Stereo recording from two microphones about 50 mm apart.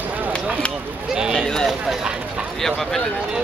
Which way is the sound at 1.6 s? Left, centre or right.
Centre.